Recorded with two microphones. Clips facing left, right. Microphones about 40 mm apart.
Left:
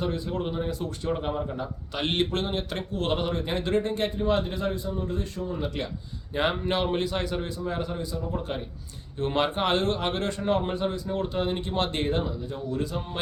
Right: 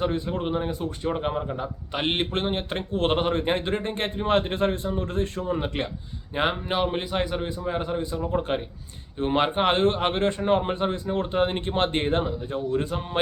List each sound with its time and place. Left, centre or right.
0.0 s a man's voice: right
6.3 s a man's voice: centre; by 8.6 s right
9.1 s a man's voice: right